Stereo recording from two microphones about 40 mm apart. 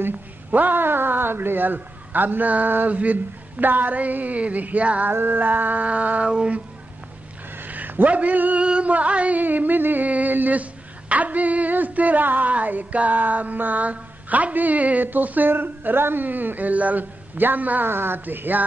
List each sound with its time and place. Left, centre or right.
0.5 s a man's voice: right
2.9 s female singing: right
5.1 s a man's voice: right
5.9 s female singing: right
6.2 s a sound: right
7.5 s a sound: right
8.5 s a sound: right
8.9 s female singing: right
9.4 s a man's voice: right
10.0 s female singing: right
15.0 s a man's voice: right
15.5 s a man's voice: right
17.8 s speech: right
18.2 s a man's voice: right